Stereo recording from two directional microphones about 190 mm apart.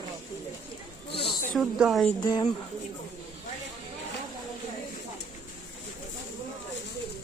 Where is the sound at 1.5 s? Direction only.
Centre (ahead or behind).